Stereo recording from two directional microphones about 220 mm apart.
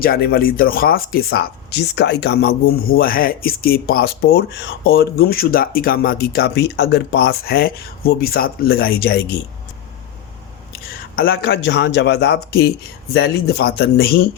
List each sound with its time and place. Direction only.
0.0 s speech: 40° left (ahead or behind)
11.1 s speech: 45° left (ahead or behind)